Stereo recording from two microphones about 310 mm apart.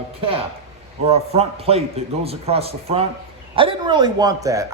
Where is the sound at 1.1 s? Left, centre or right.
Centre.